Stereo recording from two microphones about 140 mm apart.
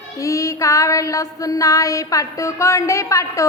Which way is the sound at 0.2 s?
25° left (ahead or behind).